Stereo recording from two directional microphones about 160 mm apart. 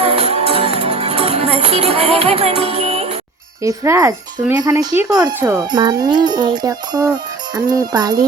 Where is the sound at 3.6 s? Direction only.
20° right (ahead or behind).